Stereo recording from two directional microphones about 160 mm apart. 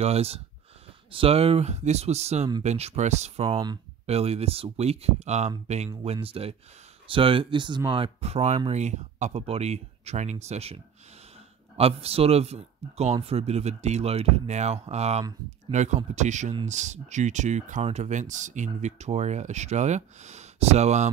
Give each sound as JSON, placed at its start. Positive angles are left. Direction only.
{"t": 0.0, "sound": "speech", "side_deg": -40}
{"t": 3.5, "sound": "speech", "side_deg": -25}
{"t": 4.0, "sound": "speech", "side_deg": -40}